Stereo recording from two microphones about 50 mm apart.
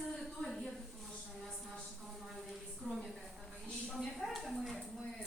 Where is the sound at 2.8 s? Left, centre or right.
Centre.